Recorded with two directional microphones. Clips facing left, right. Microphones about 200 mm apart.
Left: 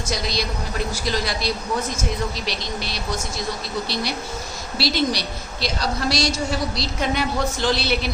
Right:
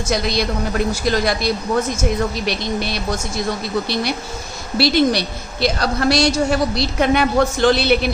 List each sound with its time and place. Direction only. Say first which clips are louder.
0.1 s a woman's voice: right 7 dB; 60° right (ahead or behind)
4.8 s a woman's voice: right 7 dB; 60° right (ahead or behind)